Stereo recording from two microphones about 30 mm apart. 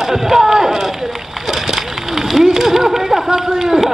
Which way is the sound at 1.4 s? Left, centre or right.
Centre.